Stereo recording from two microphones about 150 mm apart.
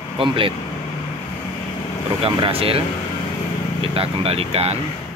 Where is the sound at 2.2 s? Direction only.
40° right (ahead or behind).